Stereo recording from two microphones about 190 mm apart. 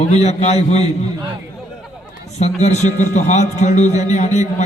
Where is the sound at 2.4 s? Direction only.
35° left (ahead or behind).